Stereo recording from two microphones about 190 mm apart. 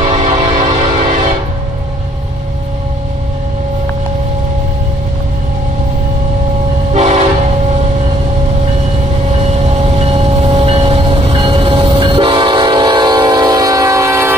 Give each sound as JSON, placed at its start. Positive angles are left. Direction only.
{"t": 0.0, "sound": "music", "side_deg": -35}
{"t": 6.9, "sound": "train", "side_deg": -35}
{"t": 9.4, "sound": "vehicle", "side_deg": -35}